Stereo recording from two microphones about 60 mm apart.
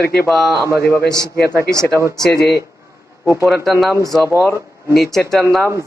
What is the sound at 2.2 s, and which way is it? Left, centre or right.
Speech, centre.